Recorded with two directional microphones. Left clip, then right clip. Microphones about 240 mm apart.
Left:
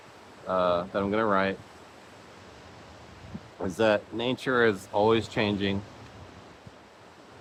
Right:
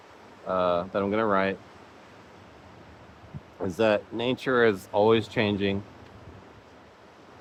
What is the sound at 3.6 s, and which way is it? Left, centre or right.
Speech, centre.